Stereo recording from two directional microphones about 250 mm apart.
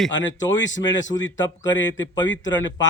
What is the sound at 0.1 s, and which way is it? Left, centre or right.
Speech, left.